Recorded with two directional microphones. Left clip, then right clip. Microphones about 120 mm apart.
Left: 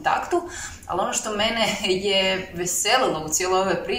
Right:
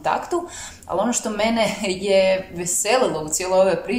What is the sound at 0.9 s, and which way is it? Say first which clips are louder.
A woman's voice: right 2 dB; 30° right (ahead or behind).